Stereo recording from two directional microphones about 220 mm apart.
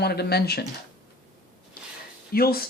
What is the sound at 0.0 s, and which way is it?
Speech, 45° left (ahead or behind).